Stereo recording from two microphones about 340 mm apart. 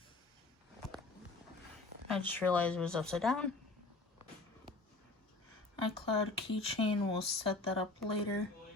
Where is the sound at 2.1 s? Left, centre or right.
Centre.